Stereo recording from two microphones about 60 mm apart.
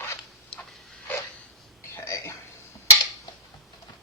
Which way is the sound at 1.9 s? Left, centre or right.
Left.